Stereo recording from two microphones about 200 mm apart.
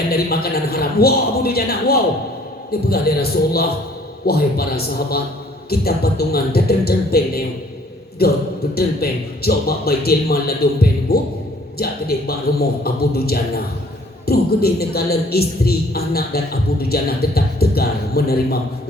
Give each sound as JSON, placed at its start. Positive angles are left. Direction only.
{"t": 0.1, "sound": "a woman's voice", "side_deg": 50}
{"t": 5.8, "sound": "a woman's voice", "side_deg": 50}